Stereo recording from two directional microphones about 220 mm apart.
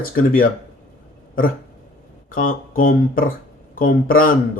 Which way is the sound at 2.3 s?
40° left (ahead or behind).